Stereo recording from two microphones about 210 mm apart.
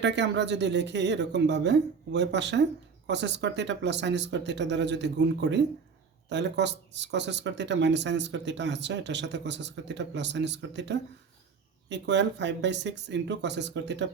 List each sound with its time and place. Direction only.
0.0 s speech: 55° right (ahead or behind)